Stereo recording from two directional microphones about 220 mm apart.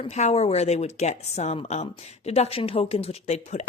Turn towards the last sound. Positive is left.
turn(degrees=30)  # may be behind; listen again after turning